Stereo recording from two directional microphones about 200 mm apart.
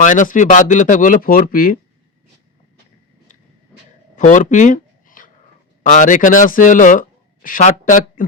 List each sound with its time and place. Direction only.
0.0 s speech: 40° left (ahead or behind)
4.1 s a sound: 40° left (ahead or behind)
5.8 s speech: 40° left (ahead or behind)